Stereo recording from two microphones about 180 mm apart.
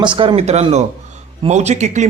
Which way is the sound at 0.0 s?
25° right (ahead or behind).